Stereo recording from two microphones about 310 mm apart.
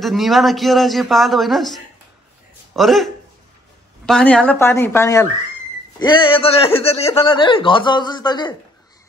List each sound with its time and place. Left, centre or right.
0.0 s a man's voice: centre